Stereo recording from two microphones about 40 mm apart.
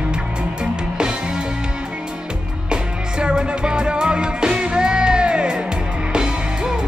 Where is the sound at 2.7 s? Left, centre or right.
Right.